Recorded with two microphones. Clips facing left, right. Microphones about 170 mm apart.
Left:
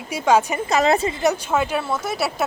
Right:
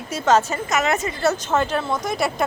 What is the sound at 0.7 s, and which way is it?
Speech, 30° left (ahead or behind).